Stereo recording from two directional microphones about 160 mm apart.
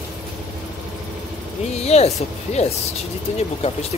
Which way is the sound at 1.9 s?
40° left (ahead or behind).